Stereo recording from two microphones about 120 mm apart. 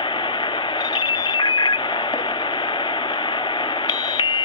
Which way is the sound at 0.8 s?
35° left (ahead or behind).